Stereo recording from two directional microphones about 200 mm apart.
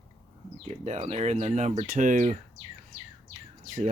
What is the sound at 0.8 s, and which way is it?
Speech, 35° right (ahead or behind).